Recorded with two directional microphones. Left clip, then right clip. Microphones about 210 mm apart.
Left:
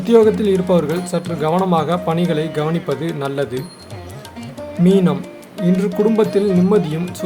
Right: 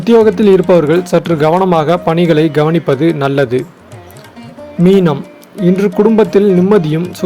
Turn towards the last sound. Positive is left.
turn(degrees=-25)  # may be behind; listen again after turning